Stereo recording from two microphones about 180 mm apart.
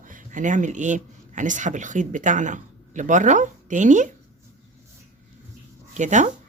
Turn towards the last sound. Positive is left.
turn(degrees=-40)  # may be behind; listen again after turning